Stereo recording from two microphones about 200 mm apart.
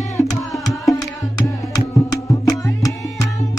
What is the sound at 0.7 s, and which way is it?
Music, 20° left (ahead or behind).